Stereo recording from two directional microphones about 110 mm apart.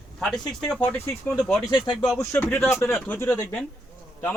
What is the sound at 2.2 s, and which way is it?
A man's voice, 20° left (ahead or behind).